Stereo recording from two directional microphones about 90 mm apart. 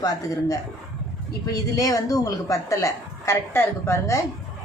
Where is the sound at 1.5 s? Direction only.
40° left (ahead or behind).